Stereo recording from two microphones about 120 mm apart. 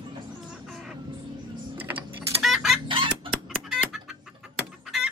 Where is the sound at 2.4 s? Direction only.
5° right (ahead or behind).